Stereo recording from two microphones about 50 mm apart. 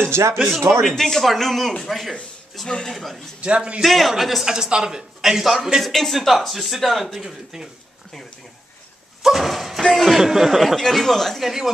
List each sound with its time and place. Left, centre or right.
0.1 s speech: right
0.8 s speech: centre
3.3 s a man's voice: right
3.8 s a man's voice: centre
9.2 s speech: centre
10.8 s speech: centre